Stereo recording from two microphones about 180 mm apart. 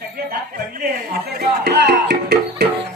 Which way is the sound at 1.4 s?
70° right (ahead or behind).